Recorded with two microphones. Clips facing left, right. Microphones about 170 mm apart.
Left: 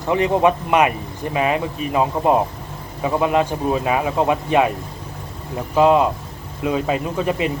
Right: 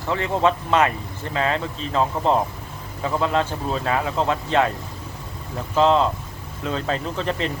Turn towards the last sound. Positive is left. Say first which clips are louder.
# left 4 dB
turn(degrees=10)  # may be behind; listen again after turning